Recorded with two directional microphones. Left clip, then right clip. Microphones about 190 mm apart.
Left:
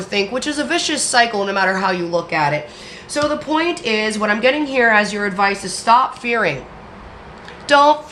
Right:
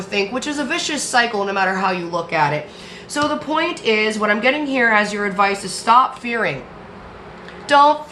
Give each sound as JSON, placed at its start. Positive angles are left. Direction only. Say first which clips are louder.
{"t": 0.1, "sound": "a woman's voice", "louder": "left 1 dB", "side_deg": 20}
{"t": 7.7, "sound": "a woman's voice", "louder": "left 1 dB", "side_deg": 20}